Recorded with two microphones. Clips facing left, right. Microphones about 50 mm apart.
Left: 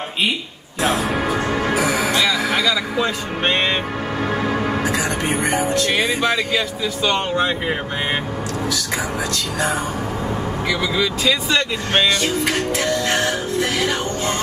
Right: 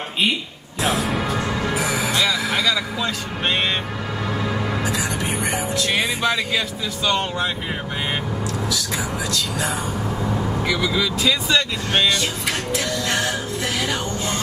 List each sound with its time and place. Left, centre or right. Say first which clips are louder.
0.8 s speech: left 2 dB; centre
1.4 s music: left 4 dB; left
3.0 s speech: left 4 dB; left
4.4 s music: left 2 dB; left
6.2 s speech: left 2 dB; centre
7.2 s speech: left 4 dB; left
10.7 s speech: left 2 dB; centre
12.2 s music: left 5 dB; left